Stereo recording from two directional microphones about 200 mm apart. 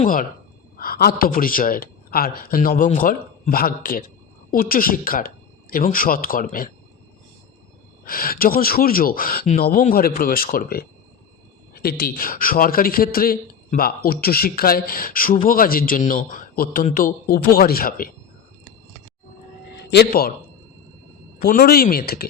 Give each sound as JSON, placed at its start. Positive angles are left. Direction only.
{"t": 0.0, "sound": "a man's voice", "side_deg": 45}
{"t": 8.0, "sound": "a man's voice", "side_deg": 45}
{"t": 19.7, "sound": "speech", "side_deg": 55}
{"t": 21.4, "sound": "a man's voice", "side_deg": 50}